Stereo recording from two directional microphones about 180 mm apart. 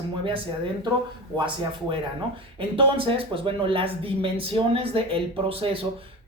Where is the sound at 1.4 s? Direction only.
30° right (ahead or behind).